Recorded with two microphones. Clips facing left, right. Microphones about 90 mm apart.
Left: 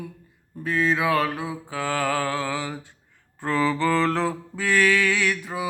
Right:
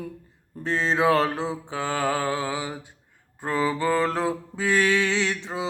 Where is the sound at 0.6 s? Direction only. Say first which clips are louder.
Right 1 dB; 30° right (ahead or behind).